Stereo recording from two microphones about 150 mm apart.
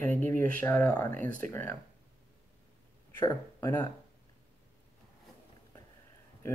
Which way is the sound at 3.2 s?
15° left (ahead or behind).